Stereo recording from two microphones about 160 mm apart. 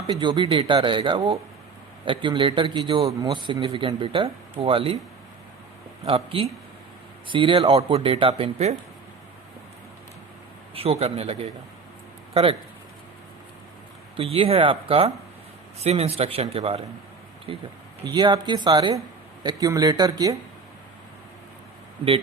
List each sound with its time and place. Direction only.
0.1 s speech: 30° right (ahead or behind)
6.1 s speech: 35° right (ahead or behind)
10.8 s speech: 40° right (ahead or behind)
14.2 s speech: 35° right (ahead or behind)